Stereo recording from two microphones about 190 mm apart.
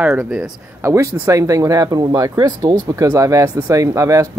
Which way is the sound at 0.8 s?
15° right (ahead or behind).